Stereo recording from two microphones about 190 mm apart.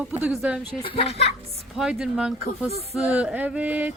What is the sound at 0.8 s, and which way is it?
Speech, 30° left (ahead or behind).